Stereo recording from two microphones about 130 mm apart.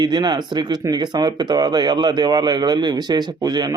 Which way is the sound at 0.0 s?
35° right (ahead or behind).